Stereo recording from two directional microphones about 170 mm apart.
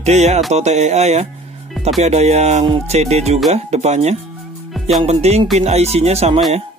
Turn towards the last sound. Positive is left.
turn(degrees=-40)  # may be behind; listen again after turning